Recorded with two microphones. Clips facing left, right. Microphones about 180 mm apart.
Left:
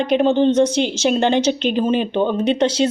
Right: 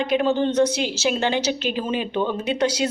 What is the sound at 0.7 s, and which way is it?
A woman's voice, 5° right (ahead or behind).